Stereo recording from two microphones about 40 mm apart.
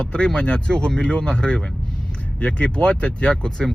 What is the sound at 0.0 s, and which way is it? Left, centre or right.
Speech, left.